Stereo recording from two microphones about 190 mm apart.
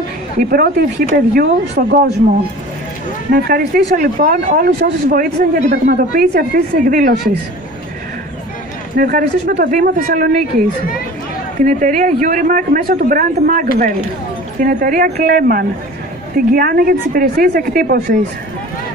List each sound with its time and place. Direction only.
0.4 s speech: 50° right (ahead or behind)
3.3 s speech: 50° right (ahead or behind)
8.9 s speech: 50° right (ahead or behind)
11.6 s speech: 45° right (ahead or behind)